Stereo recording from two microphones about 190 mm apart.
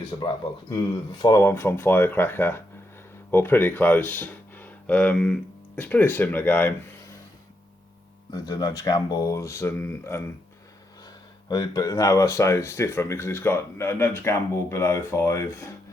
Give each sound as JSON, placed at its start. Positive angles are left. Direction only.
{"t": 0.7, "sound": "speech", "side_deg": 25}
{"t": 8.3, "sound": "speech", "side_deg": 20}
{"t": 11.4, "sound": "speech", "side_deg": 20}